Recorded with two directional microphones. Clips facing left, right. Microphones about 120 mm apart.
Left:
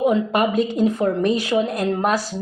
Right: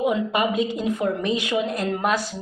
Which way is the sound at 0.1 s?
40° left (ahead or behind).